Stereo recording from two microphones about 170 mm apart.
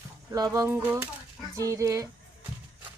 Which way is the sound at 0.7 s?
10° right (ahead or behind).